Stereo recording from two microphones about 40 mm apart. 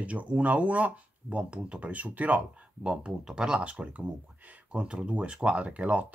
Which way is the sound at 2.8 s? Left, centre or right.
Right.